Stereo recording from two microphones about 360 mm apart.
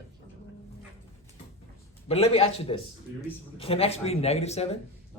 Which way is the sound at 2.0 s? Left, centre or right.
Centre.